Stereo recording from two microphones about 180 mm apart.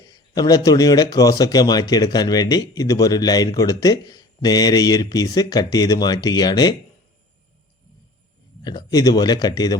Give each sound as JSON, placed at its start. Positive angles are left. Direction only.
{"t": 0.1, "sound": "speech", "side_deg": 20}
{"t": 8.6, "sound": "speech", "side_deg": 20}